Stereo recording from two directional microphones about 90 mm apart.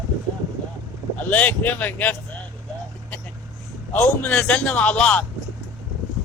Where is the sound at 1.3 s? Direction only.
20° left (ahead or behind).